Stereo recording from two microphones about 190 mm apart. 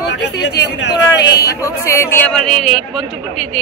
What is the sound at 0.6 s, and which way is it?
Speech, 65° left (ahead or behind).